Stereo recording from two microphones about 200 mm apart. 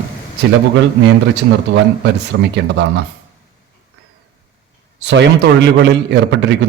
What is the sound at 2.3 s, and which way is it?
Speech, 70° right (ahead or behind).